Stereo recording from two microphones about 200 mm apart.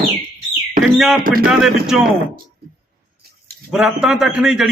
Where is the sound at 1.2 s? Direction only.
45° right (ahead or behind).